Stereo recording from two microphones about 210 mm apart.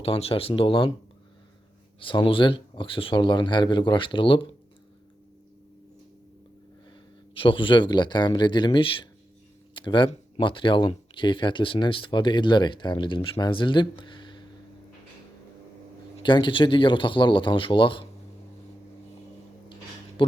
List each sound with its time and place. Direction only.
0.0 s speech: 25° left (ahead or behind)
2.0 s speech: 25° left (ahead or behind)
7.3 s speech: 25° left (ahead or behind)
16.1 s speech: 20° left (ahead or behind)